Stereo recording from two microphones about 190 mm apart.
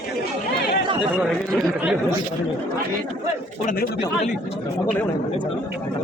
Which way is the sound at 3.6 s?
45° left (ahead or behind).